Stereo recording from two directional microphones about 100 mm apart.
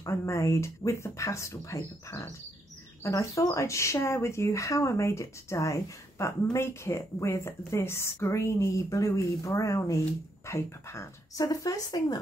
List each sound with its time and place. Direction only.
0.0 s a woman's voice: 30° left (ahead or behind)